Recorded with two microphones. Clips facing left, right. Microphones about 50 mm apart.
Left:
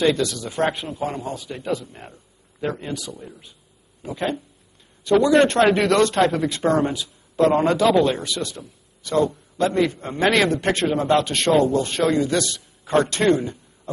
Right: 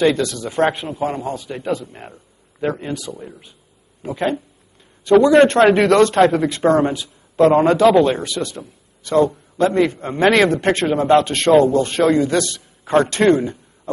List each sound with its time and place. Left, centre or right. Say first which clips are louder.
0.0 s a man's voice: right 3 dB; centre